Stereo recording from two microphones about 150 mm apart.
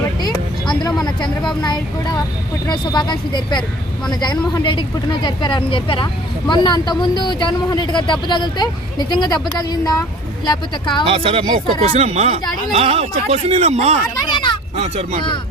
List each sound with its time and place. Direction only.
0.7 s speech: 30° left (ahead or behind)
11.1 s speech: 35° right (ahead or behind)
14.3 s a sound: 30° left (ahead or behind)
14.8 s speech: 45° right (ahead or behind)